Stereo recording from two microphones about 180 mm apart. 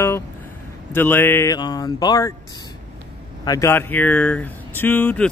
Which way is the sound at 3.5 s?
15° left (ahead or behind).